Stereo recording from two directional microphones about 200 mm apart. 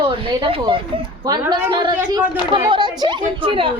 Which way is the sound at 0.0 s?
30° right (ahead or behind).